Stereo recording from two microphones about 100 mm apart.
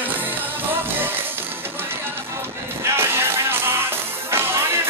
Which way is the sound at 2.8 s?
25° right (ahead or behind).